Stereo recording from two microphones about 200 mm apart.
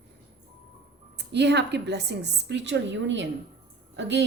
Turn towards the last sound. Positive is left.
turn(degrees=-60)  # may be behind; listen again after turning